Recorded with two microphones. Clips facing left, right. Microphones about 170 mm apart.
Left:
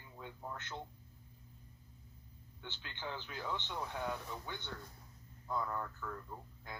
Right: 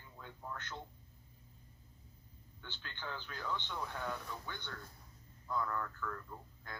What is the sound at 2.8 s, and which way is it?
A man's voice, 20° left (ahead or behind).